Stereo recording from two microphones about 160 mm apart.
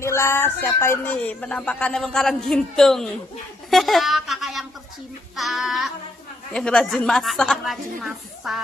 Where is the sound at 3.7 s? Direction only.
Centre (ahead or behind).